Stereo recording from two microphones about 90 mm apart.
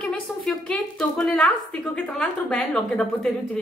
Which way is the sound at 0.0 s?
10° left (ahead or behind).